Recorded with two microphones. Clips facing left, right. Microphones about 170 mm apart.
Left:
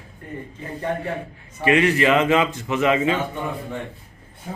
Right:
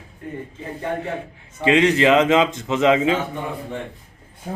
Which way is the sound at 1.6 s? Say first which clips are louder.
Right 2 dB; 20° right (ahead or behind).